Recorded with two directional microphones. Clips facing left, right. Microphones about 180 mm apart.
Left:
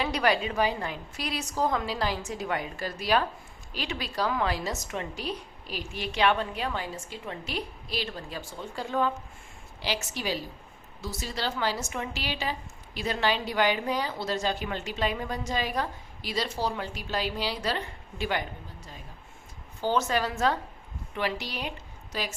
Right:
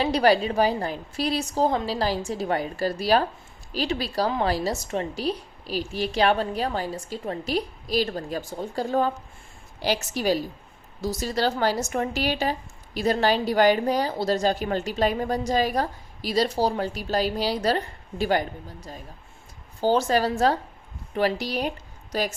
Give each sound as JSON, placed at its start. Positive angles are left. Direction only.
{"t": 0.0, "sound": "a woman's voice", "side_deg": -35}